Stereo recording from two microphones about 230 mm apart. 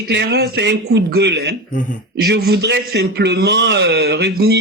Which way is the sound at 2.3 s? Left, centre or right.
Right.